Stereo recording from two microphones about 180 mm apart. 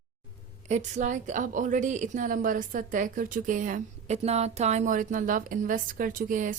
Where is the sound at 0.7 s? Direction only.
40° right (ahead or behind).